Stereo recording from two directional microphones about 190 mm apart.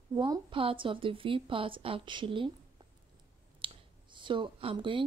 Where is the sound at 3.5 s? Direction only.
25° right (ahead or behind).